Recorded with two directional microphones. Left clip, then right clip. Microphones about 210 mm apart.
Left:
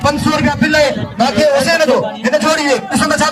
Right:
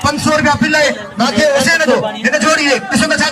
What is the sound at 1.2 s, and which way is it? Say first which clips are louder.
A man's voice: even; 30° right (ahead or behind).